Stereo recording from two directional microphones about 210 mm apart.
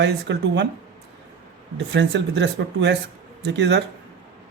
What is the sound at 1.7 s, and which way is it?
Speech, 55° right (ahead or behind).